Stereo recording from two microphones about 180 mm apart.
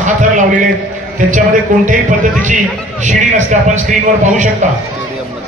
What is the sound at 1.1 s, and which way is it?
A man's voice, 45° right (ahead or behind).